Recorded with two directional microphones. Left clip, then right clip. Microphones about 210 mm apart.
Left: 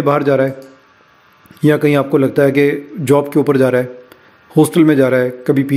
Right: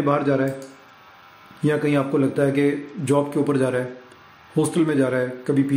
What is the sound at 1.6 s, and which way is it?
Speech, 40° left (ahead or behind).